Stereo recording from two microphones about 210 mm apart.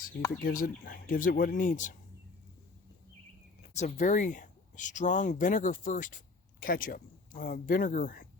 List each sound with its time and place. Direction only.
0.4 s speech: 40° left (ahead or behind)
3.8 s speech: 35° left (ahead or behind)